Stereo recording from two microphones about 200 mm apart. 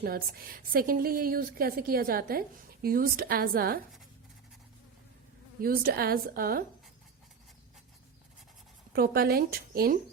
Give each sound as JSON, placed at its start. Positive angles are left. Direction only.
{"t": 0.0, "sound": "a woman's voice", "side_deg": -50}
{"t": 5.5, "sound": "a woman's voice", "side_deg": -45}
{"t": 8.9, "sound": "a woman's voice", "side_deg": -50}